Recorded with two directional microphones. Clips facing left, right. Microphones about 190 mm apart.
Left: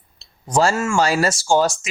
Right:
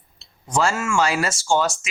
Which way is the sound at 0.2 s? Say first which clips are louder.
Left 4 dB; 35° left (ahead or behind).